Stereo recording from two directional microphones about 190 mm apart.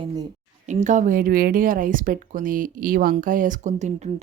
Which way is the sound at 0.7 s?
40° right (ahead or behind).